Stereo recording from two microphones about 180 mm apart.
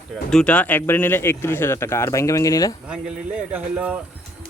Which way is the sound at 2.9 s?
5° right (ahead or behind).